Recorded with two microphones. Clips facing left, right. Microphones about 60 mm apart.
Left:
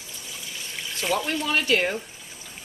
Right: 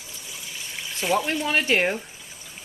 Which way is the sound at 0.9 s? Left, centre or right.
Centre.